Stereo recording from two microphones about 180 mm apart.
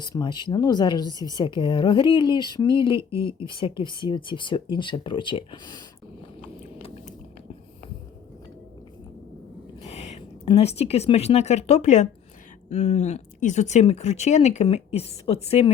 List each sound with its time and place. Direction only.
0.0 s speech: 25° left (ahead or behind)
9.8 s speech: 35° left (ahead or behind)